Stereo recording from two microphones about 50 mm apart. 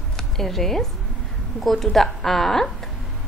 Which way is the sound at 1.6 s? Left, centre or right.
Centre.